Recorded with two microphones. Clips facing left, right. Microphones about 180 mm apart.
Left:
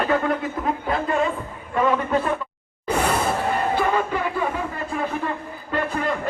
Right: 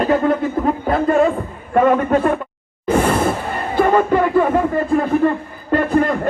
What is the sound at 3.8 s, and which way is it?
Music, 50° right (ahead or behind).